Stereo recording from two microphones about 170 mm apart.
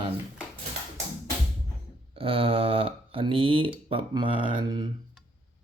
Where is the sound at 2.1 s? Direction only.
35° right (ahead or behind).